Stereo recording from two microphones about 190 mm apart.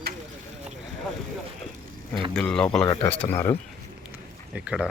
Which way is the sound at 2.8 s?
25° left (ahead or behind).